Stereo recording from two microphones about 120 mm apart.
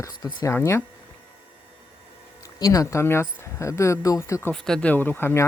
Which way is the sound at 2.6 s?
30° left (ahead or behind).